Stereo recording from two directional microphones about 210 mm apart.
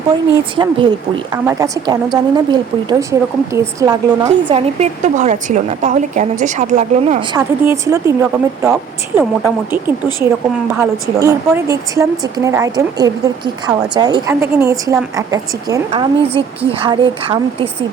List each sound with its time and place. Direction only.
0.5 s a woman's voice: 25° right (ahead or behind)
7.3 s speech: 10° right (ahead or behind)
11.2 s speech: 15° right (ahead or behind)
15.9 s speech: 25° right (ahead or behind)